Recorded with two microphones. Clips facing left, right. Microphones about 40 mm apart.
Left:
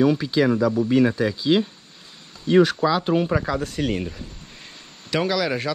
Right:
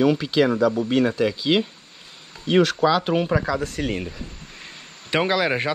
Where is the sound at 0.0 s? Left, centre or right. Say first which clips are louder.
Even; right.